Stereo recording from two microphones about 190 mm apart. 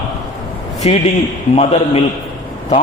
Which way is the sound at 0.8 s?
30° left (ahead or behind).